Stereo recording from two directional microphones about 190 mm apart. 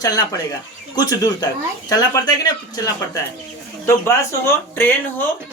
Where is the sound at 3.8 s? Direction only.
15° left (ahead or behind).